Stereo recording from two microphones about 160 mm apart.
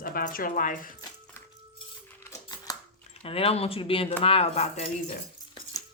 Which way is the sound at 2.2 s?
25° left (ahead or behind).